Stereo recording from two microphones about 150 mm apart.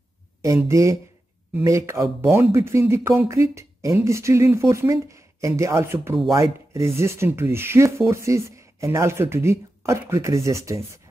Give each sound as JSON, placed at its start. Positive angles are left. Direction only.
{"t": 0.7, "sound": "speech", "side_deg": -20}